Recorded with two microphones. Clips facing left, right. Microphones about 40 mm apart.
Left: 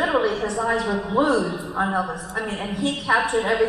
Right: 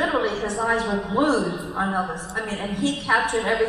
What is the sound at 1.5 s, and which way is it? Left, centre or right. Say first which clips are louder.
Speech: left 1 dB; centre.